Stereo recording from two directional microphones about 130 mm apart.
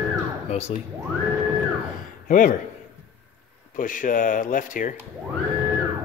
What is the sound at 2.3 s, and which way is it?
Speech, 90° left.